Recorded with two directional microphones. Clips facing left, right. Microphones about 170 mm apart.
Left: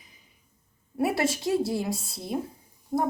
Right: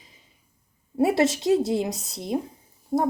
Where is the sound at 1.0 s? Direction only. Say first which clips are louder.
Right 5 dB; 25° right (ahead or behind).